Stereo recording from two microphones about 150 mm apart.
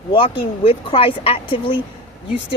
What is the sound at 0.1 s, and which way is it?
Speech, 35° left (ahead or behind).